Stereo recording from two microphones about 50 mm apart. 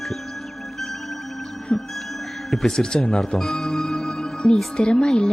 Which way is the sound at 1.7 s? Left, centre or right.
Centre.